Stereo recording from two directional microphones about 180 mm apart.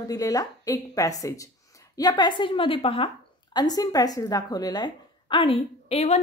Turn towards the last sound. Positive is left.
turn(degrees=35)  # may be behind; listen again after turning